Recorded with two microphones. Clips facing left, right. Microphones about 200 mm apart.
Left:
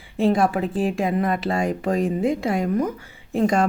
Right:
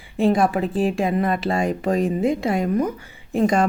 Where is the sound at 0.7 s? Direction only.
30° right (ahead or behind).